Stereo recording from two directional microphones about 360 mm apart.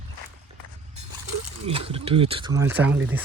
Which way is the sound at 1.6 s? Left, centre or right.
Centre.